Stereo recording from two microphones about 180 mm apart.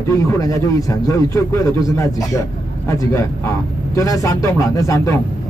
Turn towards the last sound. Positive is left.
turn(degrees=20)  # may be behind; listen again after turning